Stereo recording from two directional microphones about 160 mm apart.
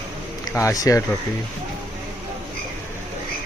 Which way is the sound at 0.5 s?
20° left (ahead or behind).